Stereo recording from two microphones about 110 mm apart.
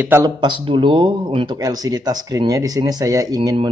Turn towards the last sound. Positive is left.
turn(degrees=-35)  # may be behind; listen again after turning